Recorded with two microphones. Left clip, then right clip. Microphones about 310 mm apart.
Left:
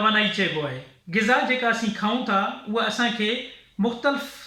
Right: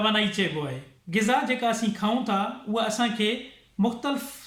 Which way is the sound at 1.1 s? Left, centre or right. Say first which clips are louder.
Left 3 dB; centre.